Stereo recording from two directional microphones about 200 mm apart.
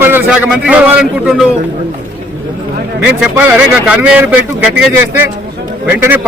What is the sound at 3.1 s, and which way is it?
A man's voice, 10° right (ahead or behind).